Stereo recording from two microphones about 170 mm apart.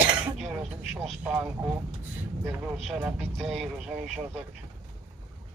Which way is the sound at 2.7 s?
Centre (ahead or behind).